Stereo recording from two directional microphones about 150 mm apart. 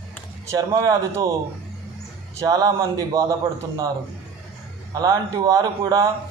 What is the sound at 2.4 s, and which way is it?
Speech, 25° right (ahead or behind).